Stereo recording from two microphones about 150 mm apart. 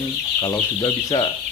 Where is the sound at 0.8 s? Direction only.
30° left (ahead or behind).